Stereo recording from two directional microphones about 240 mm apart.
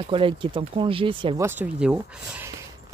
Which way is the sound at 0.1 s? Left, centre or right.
Right.